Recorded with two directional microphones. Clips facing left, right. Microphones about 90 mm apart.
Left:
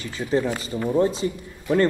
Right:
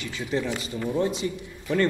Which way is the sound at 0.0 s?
40° left (ahead or behind).